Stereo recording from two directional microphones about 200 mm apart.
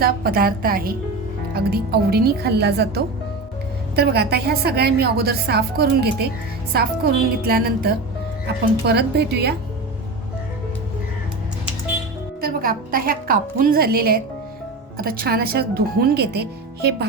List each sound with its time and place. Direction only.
0.0 s a woman's voice: 50° right (ahead or behind)
12.4 s a woman's voice: 45° right (ahead or behind)